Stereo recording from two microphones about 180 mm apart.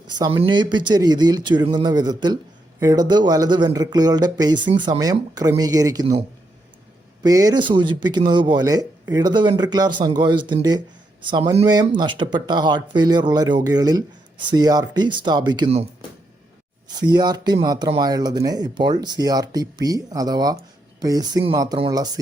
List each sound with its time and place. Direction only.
0.2 s speech: 25° right (ahead or behind)
17.0 s speech: 25° right (ahead or behind)